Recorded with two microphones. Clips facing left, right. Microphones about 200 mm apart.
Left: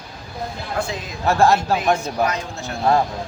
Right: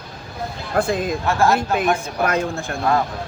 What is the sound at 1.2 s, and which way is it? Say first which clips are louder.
Speech: left 4 dB; 35° left (ahead or behind).